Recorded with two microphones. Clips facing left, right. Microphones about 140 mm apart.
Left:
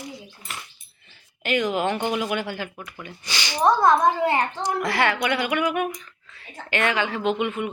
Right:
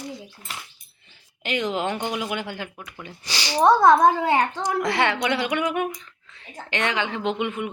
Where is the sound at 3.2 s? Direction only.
35° right (ahead or behind).